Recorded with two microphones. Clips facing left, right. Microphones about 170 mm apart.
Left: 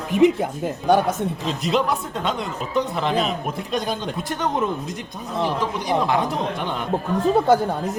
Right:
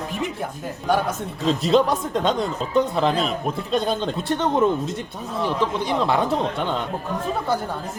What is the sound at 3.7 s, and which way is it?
Speech, 25° right (ahead or behind).